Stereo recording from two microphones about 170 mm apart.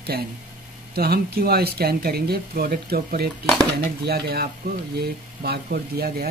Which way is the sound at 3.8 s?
65° right (ahead or behind).